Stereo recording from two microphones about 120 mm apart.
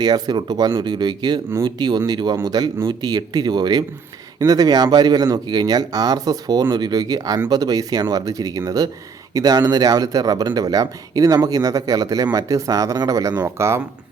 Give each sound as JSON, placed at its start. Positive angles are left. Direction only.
{"t": 0.0, "sound": "speech", "side_deg": -35}